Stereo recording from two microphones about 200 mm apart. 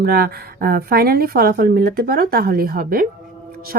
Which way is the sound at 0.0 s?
50° right (ahead or behind).